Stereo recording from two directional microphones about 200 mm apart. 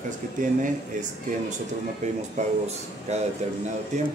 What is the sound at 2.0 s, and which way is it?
Speech, 35° right (ahead or behind).